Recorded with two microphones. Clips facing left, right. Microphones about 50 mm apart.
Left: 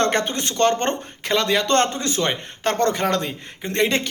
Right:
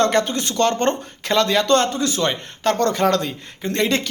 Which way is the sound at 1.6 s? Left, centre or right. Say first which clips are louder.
Right 2 dB; left.